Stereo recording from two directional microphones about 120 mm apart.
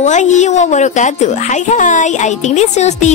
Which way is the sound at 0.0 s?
80° left.